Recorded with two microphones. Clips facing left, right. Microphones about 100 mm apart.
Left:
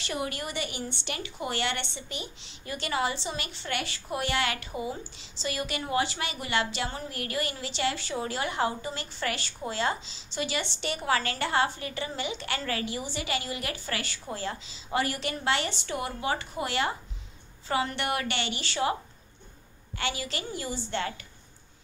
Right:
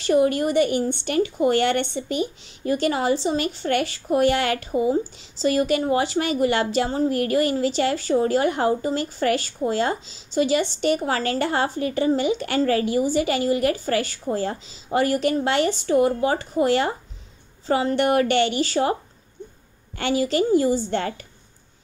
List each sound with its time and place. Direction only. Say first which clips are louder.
0.0 s a woman's voice: right 14 dB; 45° right (ahead or behind)
20.0 s a woman's voice: right 13 dB; 40° right (ahead or behind)